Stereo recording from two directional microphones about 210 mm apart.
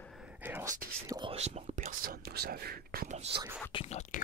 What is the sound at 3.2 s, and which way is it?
Whispering, 25° right (ahead or behind).